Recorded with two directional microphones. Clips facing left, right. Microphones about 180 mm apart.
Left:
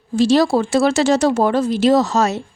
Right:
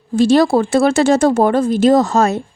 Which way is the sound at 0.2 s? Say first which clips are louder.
Right 3 dB; 55° right (ahead or behind).